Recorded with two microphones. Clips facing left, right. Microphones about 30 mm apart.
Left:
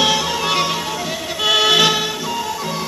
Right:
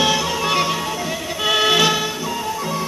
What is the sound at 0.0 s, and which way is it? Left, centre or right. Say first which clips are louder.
Music: left 1 dB; left.